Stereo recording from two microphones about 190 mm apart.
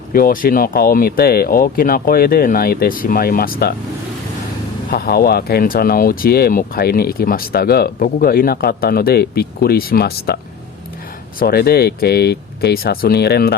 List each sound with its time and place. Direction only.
0.1 s speech: 50° left (ahead or behind)
4.9 s speech: 50° left (ahead or behind)
11.3 s speech: 55° left (ahead or behind)